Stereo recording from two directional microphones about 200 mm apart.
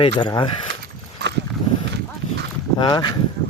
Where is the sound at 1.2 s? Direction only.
55° right (ahead or behind).